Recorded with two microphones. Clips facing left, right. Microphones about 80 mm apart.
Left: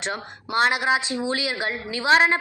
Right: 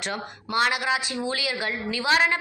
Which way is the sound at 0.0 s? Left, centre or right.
Left.